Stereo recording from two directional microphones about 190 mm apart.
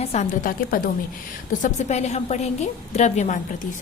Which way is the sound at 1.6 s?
40° left (ahead or behind).